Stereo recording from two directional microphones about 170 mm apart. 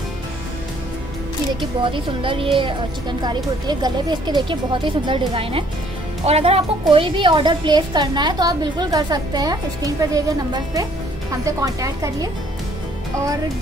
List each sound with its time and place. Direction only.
1.6 s a woman's voice: 30° right (ahead or behind)